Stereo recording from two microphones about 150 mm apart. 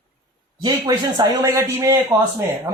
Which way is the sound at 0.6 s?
25° right (ahead or behind).